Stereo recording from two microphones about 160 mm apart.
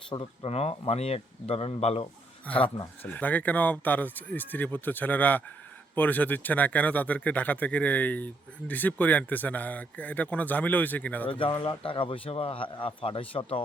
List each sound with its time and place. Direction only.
0.1 s a man's voice: 35° left (ahead or behind)
3.0 s a man's voice: 10° left (ahead or behind)
11.3 s a man's voice: 30° left (ahead or behind)